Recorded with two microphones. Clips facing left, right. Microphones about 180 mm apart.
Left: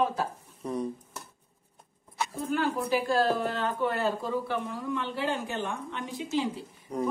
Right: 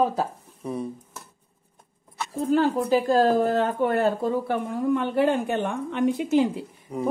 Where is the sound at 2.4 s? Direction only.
35° right (ahead or behind); by 6.5 s 55° right (ahead or behind).